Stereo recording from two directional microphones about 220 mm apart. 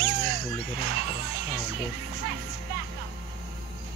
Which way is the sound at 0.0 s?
45° right (ahead or behind).